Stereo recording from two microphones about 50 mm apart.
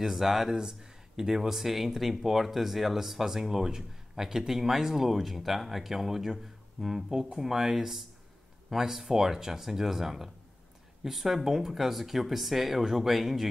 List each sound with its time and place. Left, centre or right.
0.0 s speech: centre